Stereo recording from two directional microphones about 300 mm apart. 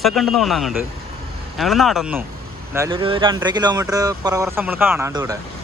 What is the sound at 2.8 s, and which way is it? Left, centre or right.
Speech, centre.